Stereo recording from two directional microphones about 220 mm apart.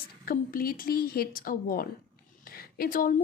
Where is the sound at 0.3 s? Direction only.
40° left (ahead or behind).